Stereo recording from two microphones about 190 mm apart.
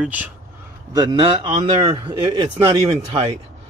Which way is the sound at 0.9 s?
25° right (ahead or behind).